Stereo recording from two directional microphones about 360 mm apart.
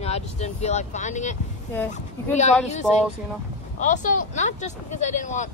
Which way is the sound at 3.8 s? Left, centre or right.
Left.